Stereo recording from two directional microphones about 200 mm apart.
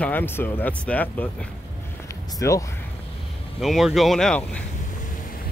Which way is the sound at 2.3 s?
15° left (ahead or behind).